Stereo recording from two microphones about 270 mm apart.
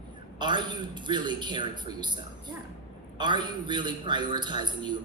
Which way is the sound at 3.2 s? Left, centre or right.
Centre.